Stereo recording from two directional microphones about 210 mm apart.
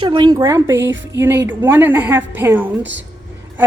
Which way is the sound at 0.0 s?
25° right (ahead or behind).